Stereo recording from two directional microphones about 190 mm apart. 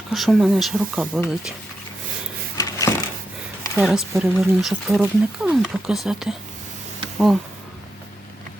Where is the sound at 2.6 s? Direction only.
15° left (ahead or behind).